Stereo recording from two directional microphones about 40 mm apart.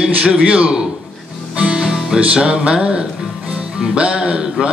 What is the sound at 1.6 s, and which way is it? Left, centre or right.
Music, centre.